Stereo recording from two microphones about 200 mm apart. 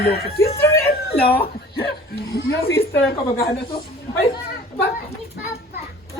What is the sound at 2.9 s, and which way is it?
Speech, 50° left (ahead or behind).